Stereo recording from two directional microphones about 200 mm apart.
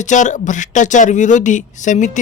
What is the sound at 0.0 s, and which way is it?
Speech, 40° left (ahead or behind).